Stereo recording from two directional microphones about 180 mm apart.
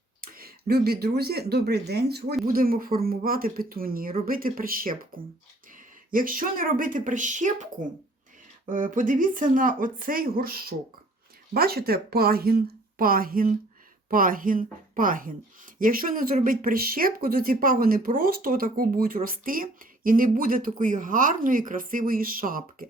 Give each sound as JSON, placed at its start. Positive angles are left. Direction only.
{"t": 0.2, "sound": "speech", "side_deg": -55}
{"t": 8.7, "sound": "speech", "side_deg": -45}